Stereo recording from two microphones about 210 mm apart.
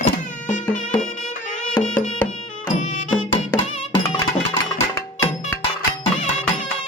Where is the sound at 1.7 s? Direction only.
5° left (ahead or behind).